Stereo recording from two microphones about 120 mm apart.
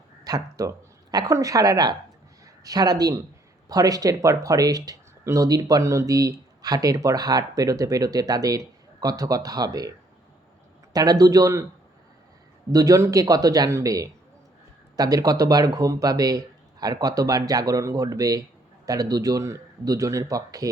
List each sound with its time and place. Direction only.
0.3 s speech: 30° right (ahead or behind)
10.9 s speech: 30° right (ahead or behind)
12.7 s a man's voice: 30° right (ahead or behind)